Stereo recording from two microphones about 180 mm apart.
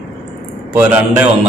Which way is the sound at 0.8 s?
10° right (ahead or behind).